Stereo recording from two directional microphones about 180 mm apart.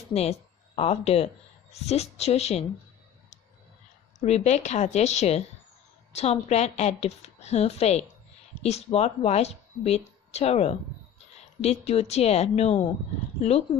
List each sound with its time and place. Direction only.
0.1 s a woman's voice: 35° left (ahead or behind)
4.2 s a woman's voice: 40° left (ahead or behind)